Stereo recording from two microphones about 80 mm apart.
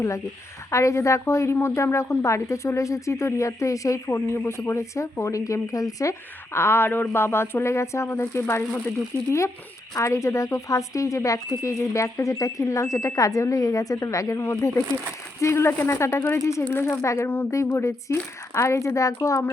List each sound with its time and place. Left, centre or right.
0.7 s speech: left
6.5 s speech: left
9.9 s speech: left